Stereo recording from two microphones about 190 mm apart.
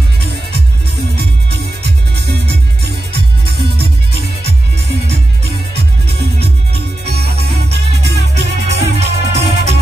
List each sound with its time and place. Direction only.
1.1 s music: 60° right (ahead or behind)
6.7 s music: 60° right (ahead or behind)
8.8 s music: 35° right (ahead or behind)